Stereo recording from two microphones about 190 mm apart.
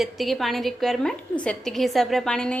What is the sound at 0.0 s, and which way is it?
A woman's voice, centre (ahead or behind).